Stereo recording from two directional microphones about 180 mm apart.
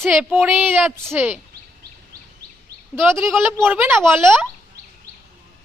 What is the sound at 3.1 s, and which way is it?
Speech, 15° right (ahead or behind).